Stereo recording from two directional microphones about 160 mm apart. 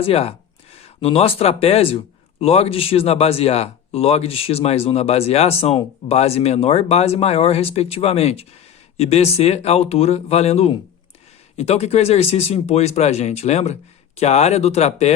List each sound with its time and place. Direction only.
0.0 s speech: 40° left (ahead or behind)